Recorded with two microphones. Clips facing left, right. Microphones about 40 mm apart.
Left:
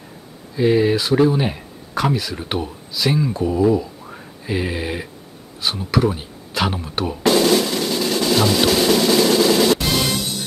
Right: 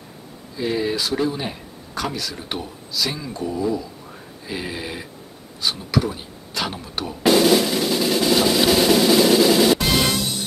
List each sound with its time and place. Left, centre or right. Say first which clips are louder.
0.6 s speech: left 7 dB; centre
7.2 s drum: even; centre